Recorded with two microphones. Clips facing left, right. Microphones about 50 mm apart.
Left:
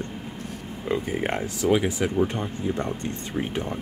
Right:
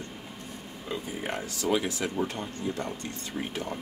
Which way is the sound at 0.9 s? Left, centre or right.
Left.